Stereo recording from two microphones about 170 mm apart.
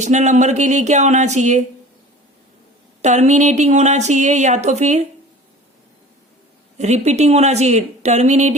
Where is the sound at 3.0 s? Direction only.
45° right (ahead or behind).